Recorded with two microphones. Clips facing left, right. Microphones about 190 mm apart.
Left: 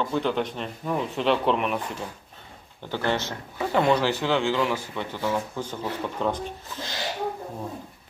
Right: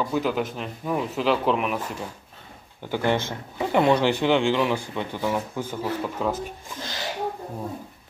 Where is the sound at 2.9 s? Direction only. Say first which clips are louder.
Right 3 dB; 15° right (ahead or behind).